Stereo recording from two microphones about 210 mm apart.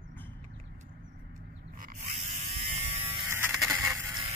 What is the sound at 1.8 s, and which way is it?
Pig, 35° right (ahead or behind).